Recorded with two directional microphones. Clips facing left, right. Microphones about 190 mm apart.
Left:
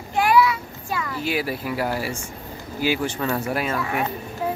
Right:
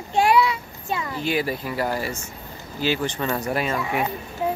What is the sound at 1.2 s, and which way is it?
Speech, 5° left (ahead or behind).